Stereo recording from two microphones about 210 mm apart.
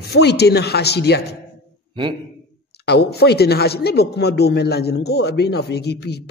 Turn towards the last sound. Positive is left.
turn(degrees=50)  # may be behind; listen again after turning